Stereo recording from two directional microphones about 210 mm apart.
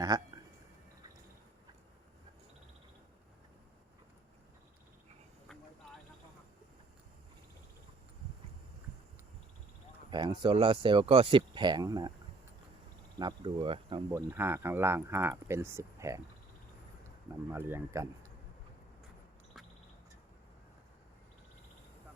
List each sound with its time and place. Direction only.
0.1 s speech: 20° right (ahead or behind)
10.1 s speech: 20° right (ahead or behind)
13.1 s speech: 20° right (ahead or behind)
14.1 s speech: 10° right (ahead or behind)
17.5 s speech: 10° right (ahead or behind)
19.6 s duck: centre (ahead or behind)